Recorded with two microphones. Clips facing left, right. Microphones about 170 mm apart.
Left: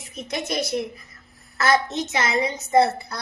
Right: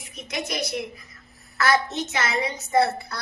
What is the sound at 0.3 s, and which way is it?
A woman's voice, 30° left (ahead or behind).